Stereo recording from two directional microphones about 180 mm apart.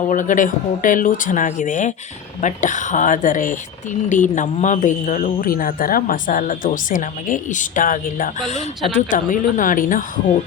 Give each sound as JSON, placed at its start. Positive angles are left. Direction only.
{"t": 0.1, "sound": "speech", "side_deg": 45}